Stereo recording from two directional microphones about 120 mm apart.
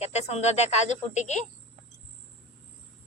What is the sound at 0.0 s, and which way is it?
Speech, 65° left (ahead or behind).